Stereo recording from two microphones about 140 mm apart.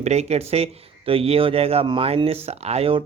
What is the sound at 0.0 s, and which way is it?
Speech, 50° right (ahead or behind).